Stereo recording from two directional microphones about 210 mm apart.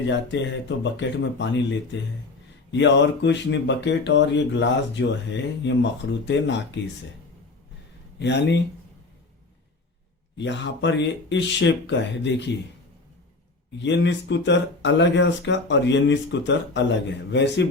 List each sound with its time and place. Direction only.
0.1 s speech: 60° left (ahead or behind)
8.2 s speech: 55° left (ahead or behind)
10.3 s speech: 60° left (ahead or behind)
13.8 s speech: 60° left (ahead or behind)